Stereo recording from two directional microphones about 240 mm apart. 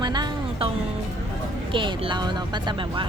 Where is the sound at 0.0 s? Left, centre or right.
Centre.